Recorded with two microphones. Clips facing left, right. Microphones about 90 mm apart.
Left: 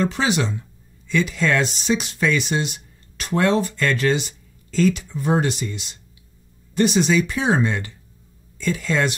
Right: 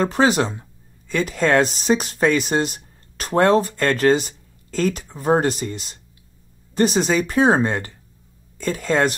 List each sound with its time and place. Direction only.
0.0 s speech: 45° right (ahead or behind)